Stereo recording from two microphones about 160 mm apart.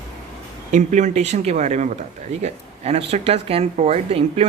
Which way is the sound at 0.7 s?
50° right (ahead or behind).